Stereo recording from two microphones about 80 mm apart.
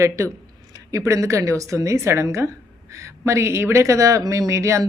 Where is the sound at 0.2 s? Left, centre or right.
Right.